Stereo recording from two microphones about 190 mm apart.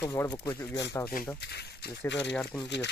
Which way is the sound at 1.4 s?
60° left (ahead or behind).